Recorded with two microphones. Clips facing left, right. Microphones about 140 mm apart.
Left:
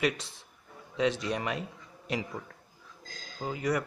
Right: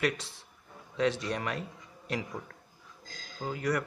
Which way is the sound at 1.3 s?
15° left (ahead or behind).